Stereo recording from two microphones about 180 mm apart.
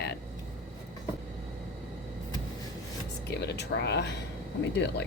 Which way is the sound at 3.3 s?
70° left (ahead or behind).